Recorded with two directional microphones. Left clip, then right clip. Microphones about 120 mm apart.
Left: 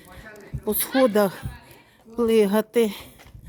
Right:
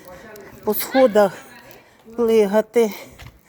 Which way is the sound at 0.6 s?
30° left (ahead or behind).